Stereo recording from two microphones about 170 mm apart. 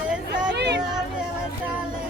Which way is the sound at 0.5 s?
90° right.